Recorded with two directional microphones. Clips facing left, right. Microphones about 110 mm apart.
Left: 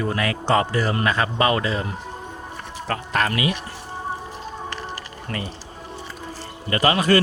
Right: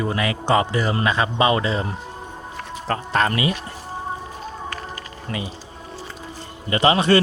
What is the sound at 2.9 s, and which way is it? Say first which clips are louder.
Speech: right 2 dB; 30° right (ahead or behind).